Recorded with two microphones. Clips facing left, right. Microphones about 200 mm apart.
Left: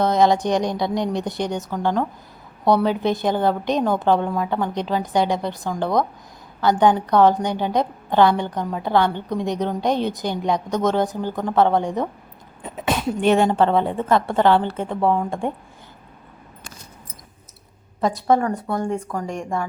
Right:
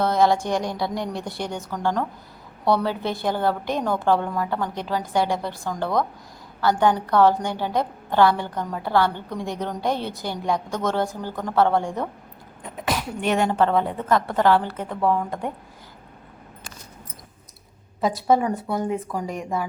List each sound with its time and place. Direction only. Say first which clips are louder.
0.0 s a woman's voice: left 2 dB; 20° left (ahead or behind)
18.0 s speech: left 1 dB; 5° right (ahead or behind)